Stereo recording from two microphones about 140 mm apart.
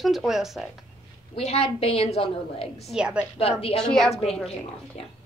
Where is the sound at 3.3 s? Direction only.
45° left (ahead or behind).